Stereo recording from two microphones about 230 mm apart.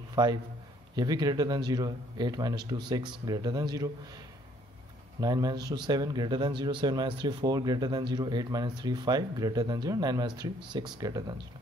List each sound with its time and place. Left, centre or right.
0.1 s a man's voice: centre
5.2 s speech: centre